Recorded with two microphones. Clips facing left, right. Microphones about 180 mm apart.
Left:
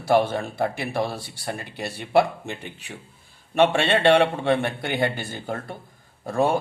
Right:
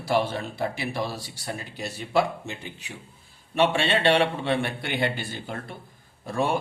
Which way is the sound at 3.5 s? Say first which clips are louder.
Left 3 dB; 50° left (ahead or behind).